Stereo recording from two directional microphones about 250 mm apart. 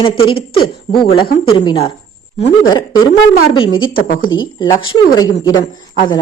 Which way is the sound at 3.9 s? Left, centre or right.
Left.